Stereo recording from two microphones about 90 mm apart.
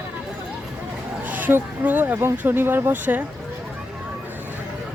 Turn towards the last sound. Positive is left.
turn(degrees=-20)  # may be behind; listen again after turning